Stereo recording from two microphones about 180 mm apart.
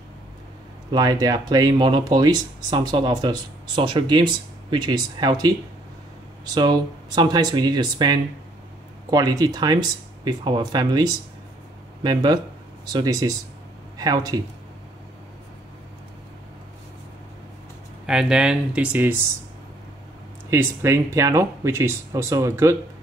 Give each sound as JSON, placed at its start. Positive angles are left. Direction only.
{"t": 0.9, "sound": "speech", "side_deg": -20}
{"t": 18.0, "sound": "speech", "side_deg": -5}
{"t": 20.4, "sound": "speech", "side_deg": -15}